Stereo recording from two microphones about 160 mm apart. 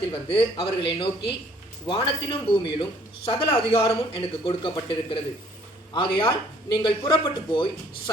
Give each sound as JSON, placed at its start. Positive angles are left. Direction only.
{"t": 0.1, "sound": "speech", "side_deg": 35}